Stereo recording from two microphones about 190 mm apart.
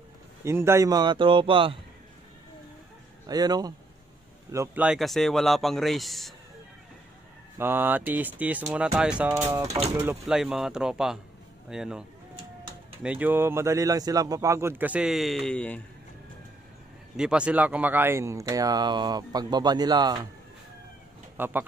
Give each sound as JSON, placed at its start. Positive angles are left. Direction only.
{"t": 0.4, "sound": "speech", "side_deg": -15}
{"t": 3.3, "sound": "speech", "side_deg": -20}
{"t": 4.8, "sound": "a man's voice", "side_deg": 0}
{"t": 7.5, "sound": "speech", "side_deg": -10}
{"t": 9.7, "sound": "speech", "side_deg": -35}
{"t": 9.9, "sound": "a man's voice", "side_deg": -5}
{"t": 13.0, "sound": "speech", "side_deg": -10}
{"t": 17.2, "sound": "speech", "side_deg": -5}
{"t": 21.4, "sound": "speech", "side_deg": -10}